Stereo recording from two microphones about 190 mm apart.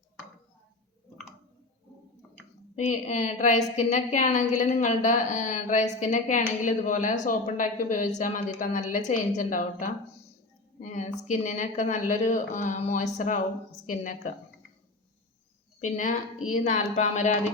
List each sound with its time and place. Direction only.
2.7 s a woman's voice: 40° left (ahead or behind)
15.8 s a woman's voice: 40° left (ahead or behind)